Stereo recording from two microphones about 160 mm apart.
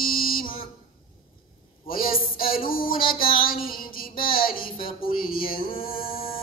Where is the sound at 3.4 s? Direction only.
65° left (ahead or behind).